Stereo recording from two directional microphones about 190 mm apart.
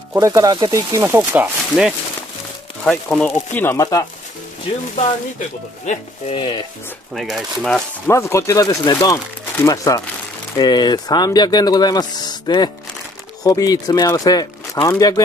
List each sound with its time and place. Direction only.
0.1 s speech: 15° right (ahead or behind); by 4.0 s 15° left (ahead or behind)
5.9 s speech: 25° left (ahead or behind)
7.2 s speech: centre (ahead or behind)
8.1 s speech: 15° left (ahead or behind)